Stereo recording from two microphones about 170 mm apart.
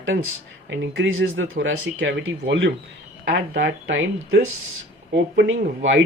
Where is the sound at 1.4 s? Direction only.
90° right.